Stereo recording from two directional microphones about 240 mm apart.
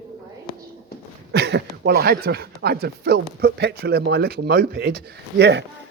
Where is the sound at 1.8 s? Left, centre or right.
Right.